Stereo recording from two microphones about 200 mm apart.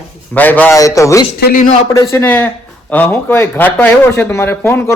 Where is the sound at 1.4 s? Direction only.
40° left (ahead or behind).